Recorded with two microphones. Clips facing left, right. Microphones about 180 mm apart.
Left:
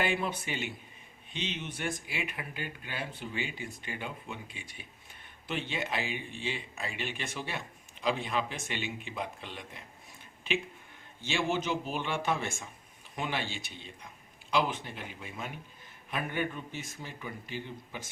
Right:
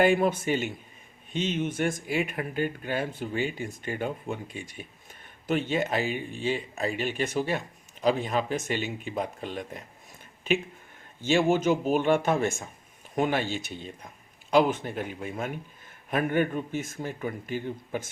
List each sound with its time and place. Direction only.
0.0 s speech: 45° right (ahead or behind)
11.2 s speech: 45° right (ahead or behind)